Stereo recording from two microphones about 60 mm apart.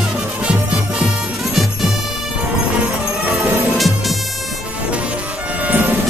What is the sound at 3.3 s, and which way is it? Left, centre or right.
Music, right.